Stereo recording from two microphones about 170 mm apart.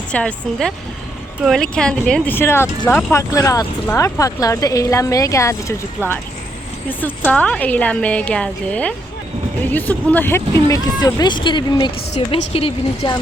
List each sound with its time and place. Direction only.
0.1 s a woman's voice: 5° left (ahead or behind); by 13.1 s 30° left (ahead or behind)